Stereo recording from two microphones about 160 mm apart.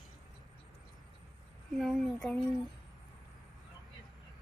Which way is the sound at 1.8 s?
Centre (ahead or behind).